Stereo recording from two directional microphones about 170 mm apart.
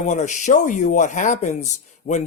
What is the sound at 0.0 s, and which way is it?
Speech, 45° left (ahead or behind).